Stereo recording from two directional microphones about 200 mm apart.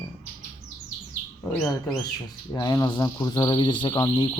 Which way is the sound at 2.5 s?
20° left (ahead or behind).